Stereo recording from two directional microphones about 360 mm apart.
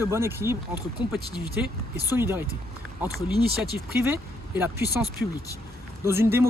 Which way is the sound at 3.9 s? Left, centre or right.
Centre.